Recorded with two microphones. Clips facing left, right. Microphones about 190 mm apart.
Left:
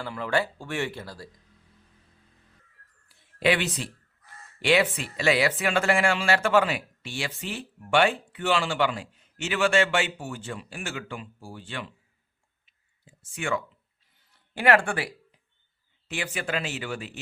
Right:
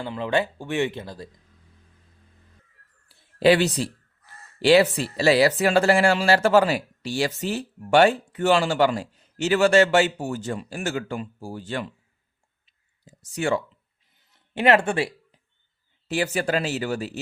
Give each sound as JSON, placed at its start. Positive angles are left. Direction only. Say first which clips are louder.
{"t": 0.0, "sound": "speech", "louder": "right 3 dB", "side_deg": -20}
{"t": 3.1, "sound": "a sound", "louder": "right 7 dB", "side_deg": -35}
{"t": 4.6, "sound": "speech", "louder": "right 6 dB", "side_deg": -35}
{"t": 12.6, "sound": "clicking", "louder": "right 5 dB", "side_deg": -40}
{"t": 14.3, "sound": "speech", "louder": "right 3 dB", "side_deg": -20}
{"t": 16.0, "sound": "speech", "louder": "right 8 dB", "side_deg": -40}